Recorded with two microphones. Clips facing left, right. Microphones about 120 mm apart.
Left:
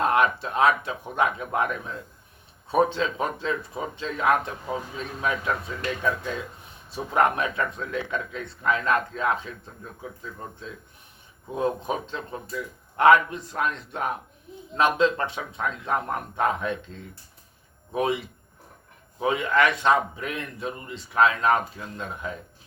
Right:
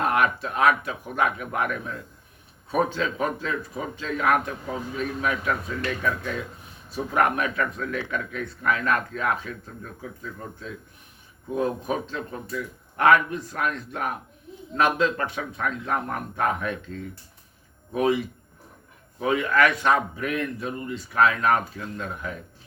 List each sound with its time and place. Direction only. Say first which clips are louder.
0.0 s speech: left 1 dB; 25° left (ahead or behind)
11.5 s speech: right 1 dB; 25° left (ahead or behind)
17.9 s speech: right 3 dB; 25° left (ahead or behind)
19.2 s speech: right 1 dB; 20° left (ahead or behind)